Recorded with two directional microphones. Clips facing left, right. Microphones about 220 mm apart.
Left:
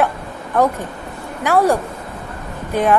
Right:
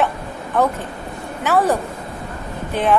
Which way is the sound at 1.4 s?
10° left (ahead or behind).